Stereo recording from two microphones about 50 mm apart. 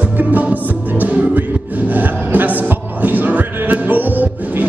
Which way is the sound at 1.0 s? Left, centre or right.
Right.